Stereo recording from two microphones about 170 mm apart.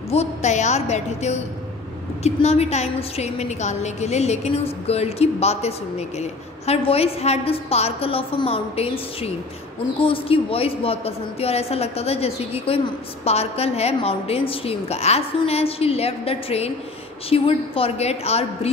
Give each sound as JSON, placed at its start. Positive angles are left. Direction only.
{"t": 0.1, "sound": "a woman's voice", "side_deg": 40}